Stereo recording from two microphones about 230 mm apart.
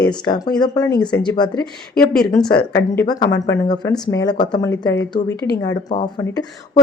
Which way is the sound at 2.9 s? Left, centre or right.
Centre.